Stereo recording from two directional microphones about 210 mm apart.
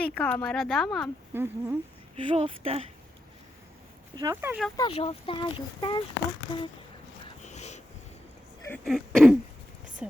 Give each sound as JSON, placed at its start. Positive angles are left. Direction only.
{"t": 0.0, "sound": "speech", "side_deg": 5}
{"t": 1.3, "sound": "speech", "side_deg": -10}
{"t": 2.1, "sound": "speech", "side_deg": -25}
{"t": 4.1, "sound": "speech", "side_deg": -15}
{"t": 4.8, "sound": "speech", "side_deg": 25}
{"t": 7.3, "sound": "sniff", "side_deg": 35}
{"t": 8.6, "sound": "speech", "side_deg": 5}